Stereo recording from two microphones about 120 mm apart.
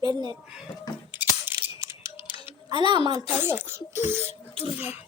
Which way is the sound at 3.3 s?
15° right (ahead or behind).